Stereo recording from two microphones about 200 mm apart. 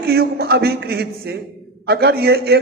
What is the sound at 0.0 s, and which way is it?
A man's voice, 50° right (ahead or behind).